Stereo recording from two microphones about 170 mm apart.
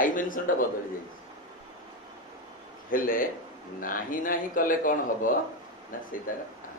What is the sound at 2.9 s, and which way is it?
A man's voice, 55° left (ahead or behind).